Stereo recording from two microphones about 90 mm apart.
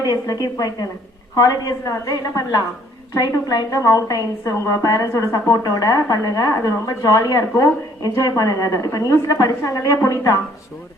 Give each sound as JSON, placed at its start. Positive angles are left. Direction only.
{"t": 0.0, "sound": "a woman's voice", "side_deg": 45}